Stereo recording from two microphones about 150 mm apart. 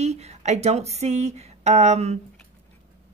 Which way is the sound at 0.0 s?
50° right (ahead or behind).